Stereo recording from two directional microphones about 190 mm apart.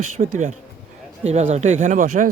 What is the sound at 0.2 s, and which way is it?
Speech, 40° right (ahead or behind).